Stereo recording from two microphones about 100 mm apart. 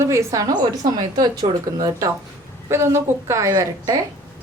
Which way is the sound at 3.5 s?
45° right (ahead or behind).